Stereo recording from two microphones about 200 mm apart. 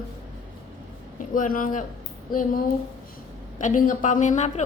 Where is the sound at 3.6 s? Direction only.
40° left (ahead or behind).